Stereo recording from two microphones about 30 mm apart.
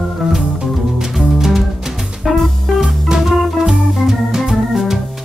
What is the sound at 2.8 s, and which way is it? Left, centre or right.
Music, centre.